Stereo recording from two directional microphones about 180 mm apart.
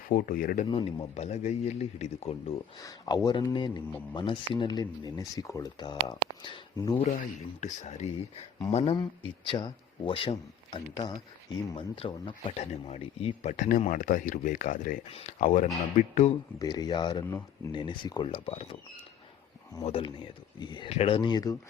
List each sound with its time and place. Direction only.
0.1 s speech: 55° left (ahead or behind)
0.7 s speech: 30° left (ahead or behind)
2.7 s speech: 20° left (ahead or behind)
7.6 s speech: 40° left (ahead or behind)
16.6 s speech: 20° left (ahead or behind)
19.8 s speech: 30° left (ahead or behind)